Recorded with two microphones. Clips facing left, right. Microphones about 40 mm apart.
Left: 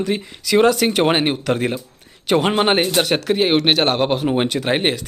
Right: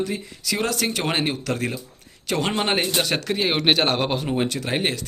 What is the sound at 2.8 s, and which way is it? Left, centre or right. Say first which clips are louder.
A man's voice: left 5 dB; centre.